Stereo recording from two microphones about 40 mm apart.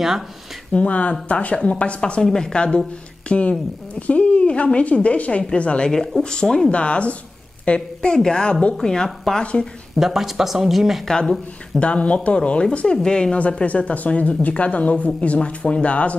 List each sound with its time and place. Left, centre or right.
0.7 s a woman's voice: left
5.9 s speech: centre
6.7 s a woman's voice: left
9.9 s speech: centre
11.1 s speech: centre
11.8 s speech: left
12.8 s a woman's voice: centre
13.4 s speech: left